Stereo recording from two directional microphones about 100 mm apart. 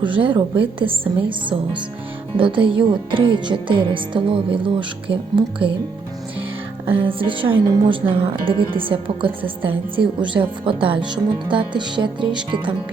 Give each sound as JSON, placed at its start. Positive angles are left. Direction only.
{"t": 0.0, "sound": "a woman's voice", "side_deg": -55}
{"t": 6.8, "sound": "a woman's voice", "side_deg": -60}